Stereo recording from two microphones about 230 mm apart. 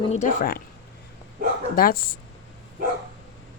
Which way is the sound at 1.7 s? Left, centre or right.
Left.